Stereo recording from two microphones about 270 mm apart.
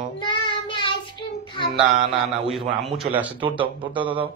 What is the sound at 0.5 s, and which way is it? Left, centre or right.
Child singing, centre.